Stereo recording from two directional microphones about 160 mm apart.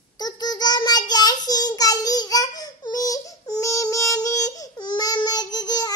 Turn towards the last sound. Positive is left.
turn(degrees=25)  # may be behind; listen again after turning